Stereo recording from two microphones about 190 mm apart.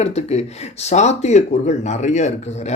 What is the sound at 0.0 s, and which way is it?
Speech, 35° left (ahead or behind).